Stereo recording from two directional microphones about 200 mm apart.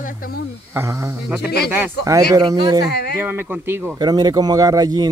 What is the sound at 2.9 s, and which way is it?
Speech, 55° left (ahead or behind).